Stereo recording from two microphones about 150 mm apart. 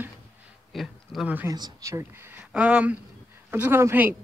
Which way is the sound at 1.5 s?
25° right (ahead or behind).